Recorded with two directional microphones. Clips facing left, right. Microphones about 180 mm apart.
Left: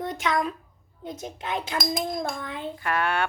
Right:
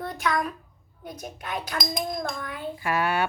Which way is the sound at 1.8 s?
5° left (ahead or behind).